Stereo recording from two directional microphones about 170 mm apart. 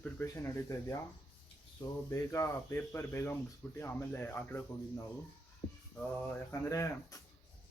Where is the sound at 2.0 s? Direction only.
15° left (ahead or behind).